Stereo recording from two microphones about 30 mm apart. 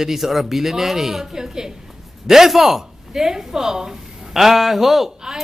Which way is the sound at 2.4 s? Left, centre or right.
Centre.